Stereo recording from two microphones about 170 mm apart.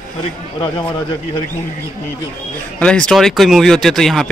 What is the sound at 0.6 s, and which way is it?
Speech, 25° left (ahead or behind).